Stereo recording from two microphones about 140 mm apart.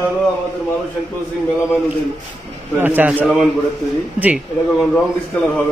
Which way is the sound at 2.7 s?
15° right (ahead or behind).